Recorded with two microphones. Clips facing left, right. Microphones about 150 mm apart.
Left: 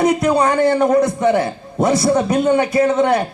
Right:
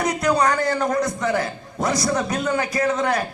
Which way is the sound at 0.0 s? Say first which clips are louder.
Left 5 dB; 25° left (ahead or behind).